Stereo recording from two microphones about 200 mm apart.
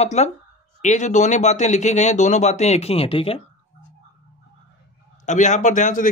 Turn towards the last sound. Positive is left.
turn(degrees=40)  # may be behind; listen again after turning